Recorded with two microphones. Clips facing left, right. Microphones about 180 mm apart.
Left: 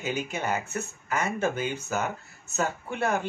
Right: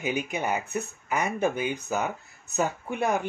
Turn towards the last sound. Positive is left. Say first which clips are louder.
# right 1 dB
turn(degrees=-15)  # may be behind; listen again after turning